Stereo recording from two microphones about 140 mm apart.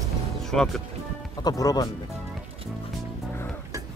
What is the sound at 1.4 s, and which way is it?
Speech, 25° left (ahead or behind).